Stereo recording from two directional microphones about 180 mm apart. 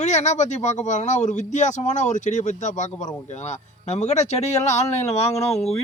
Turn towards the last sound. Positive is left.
turn(degrees=35)  # may be behind; listen again after turning